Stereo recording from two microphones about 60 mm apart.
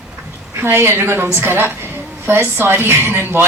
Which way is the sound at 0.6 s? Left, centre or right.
Right.